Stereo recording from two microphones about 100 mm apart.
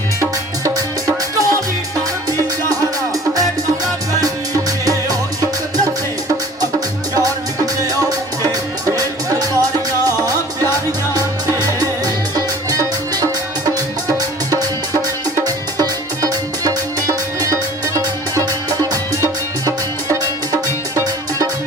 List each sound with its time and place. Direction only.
0.2 s music: 35° right (ahead or behind)
4.9 s music: 40° right (ahead or behind)